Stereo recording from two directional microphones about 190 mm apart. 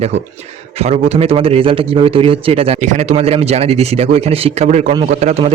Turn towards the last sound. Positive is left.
turn(degrees=-35)  # may be behind; listen again after turning